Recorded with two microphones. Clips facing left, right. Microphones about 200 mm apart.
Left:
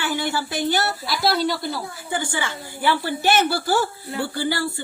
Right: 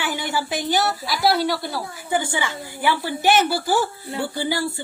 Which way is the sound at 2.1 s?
15° right (ahead or behind).